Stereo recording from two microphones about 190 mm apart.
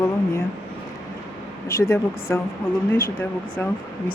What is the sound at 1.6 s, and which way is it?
Speech, 15° left (ahead or behind).